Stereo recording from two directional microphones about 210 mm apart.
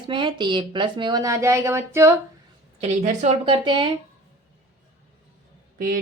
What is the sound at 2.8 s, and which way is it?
Speech, 35° right (ahead or behind).